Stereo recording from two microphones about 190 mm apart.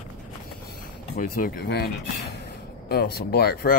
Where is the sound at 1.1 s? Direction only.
45° left (ahead or behind).